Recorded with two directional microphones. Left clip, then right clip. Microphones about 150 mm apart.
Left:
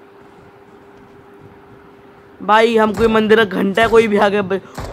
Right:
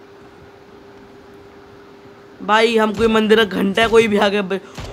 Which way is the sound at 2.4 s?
15° left (ahead or behind).